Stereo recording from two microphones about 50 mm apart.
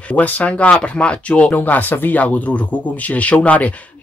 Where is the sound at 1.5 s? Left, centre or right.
Left.